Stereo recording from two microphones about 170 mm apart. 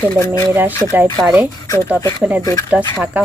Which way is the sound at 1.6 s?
20° left (ahead or behind).